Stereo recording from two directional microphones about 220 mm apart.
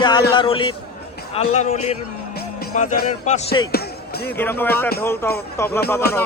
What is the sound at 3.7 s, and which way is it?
Music, 45° left (ahead or behind).